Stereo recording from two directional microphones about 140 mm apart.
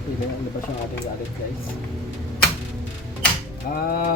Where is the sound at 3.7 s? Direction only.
90° left.